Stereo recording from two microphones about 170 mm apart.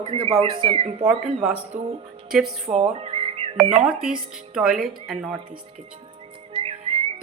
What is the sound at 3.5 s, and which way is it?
Speech, 5° right (ahead or behind).